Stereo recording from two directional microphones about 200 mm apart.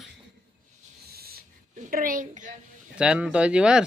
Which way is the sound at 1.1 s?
50° right (ahead or behind).